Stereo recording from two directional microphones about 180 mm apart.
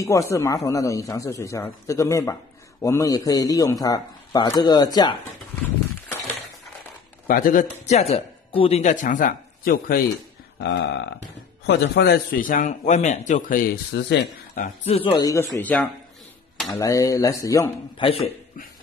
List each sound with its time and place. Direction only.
0.0 s a man's voice: 15° left (ahead or behind)
7.2 s a man's voice: 50° left (ahead or behind)
7.8 s speech: 35° left (ahead or behind); by 10.0 s 55° left (ahead or behind)
10.6 s burping: 75° left (ahead or behind)
11.6 s a man's voice: 70° left (ahead or behind)
14.9 s a man's voice: 35° left (ahead or behind)
15.1 s speech: 15° left (ahead or behind)
18.0 s a man's voice: 30° left (ahead or behind)